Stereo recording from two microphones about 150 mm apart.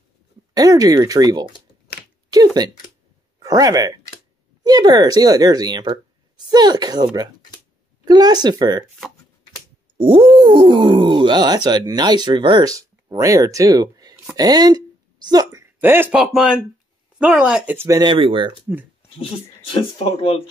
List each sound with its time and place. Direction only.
0.6 s speech: 25° right (ahead or behind)
2.3 s a sound: 25° right (ahead or behind)
3.3 s speech: 25° right (ahead or behind)
9.9 s a woman's voice: 40° right (ahead or behind); by 17.7 s 5° right (ahead or behind)
17.7 s speech: 20° right (ahead or behind)
18.1 s speech: 35° right (ahead or behind)
19.7 s speech: 40° left (ahead or behind)